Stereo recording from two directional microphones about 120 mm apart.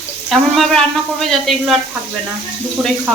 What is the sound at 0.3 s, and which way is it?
Speech, centre (ahead or behind).